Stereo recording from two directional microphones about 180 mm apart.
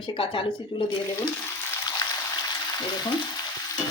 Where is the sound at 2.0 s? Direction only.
20° left (ahead or behind).